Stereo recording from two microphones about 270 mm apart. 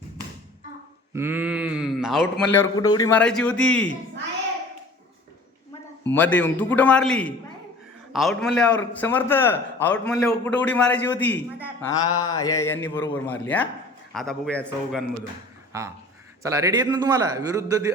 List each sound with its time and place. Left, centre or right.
1.1 s a man's voice: centre
6.1 s a man's voice: centre
15.7 s a man's voice: centre